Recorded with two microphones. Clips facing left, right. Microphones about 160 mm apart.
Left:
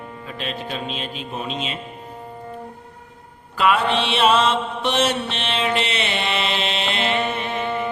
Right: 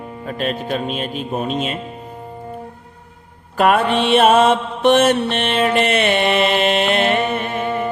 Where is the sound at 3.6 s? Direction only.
50° right (ahead or behind).